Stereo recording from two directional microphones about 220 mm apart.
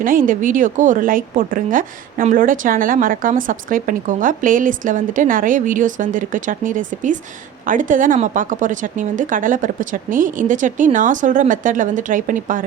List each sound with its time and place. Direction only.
0.0 s a woman's voice: 40° right (ahead or behind)